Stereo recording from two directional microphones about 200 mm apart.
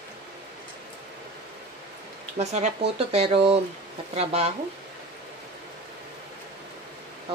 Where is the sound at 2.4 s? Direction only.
35° right (ahead or behind).